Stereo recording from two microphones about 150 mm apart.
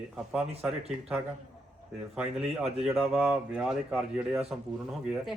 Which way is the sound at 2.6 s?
5° right (ahead or behind).